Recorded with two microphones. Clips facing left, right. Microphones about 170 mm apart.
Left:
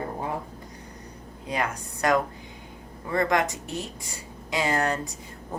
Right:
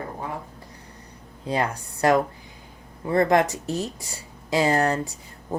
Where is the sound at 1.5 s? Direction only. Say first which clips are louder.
Right 4 dB; 30° right (ahead or behind).